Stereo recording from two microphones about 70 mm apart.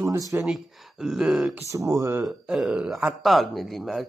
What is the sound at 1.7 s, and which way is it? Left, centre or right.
Speech, right.